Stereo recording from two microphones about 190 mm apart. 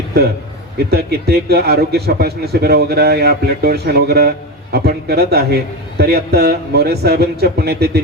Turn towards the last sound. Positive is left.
turn(degrees=-55)  # may be behind; listen again after turning